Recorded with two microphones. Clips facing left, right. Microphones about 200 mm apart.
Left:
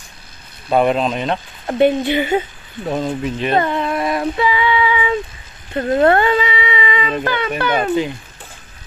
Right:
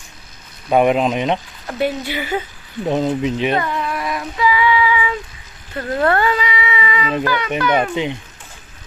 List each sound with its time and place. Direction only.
0.7 s speech: 10° right (ahead or behind)
1.7 s speech: 25° left (ahead or behind)
2.8 s speech: 20° right (ahead or behind)
3.5 s child singing: 30° left (ahead or behind)
5.7 s speech: 25° left (ahead or behind)